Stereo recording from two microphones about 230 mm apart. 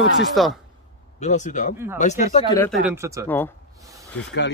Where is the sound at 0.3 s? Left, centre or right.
Centre.